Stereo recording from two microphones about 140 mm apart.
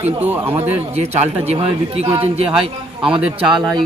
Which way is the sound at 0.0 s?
15° right (ahead or behind).